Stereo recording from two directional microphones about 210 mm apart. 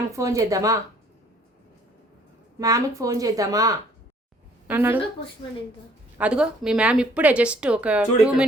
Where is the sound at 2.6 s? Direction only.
15° right (ahead or behind).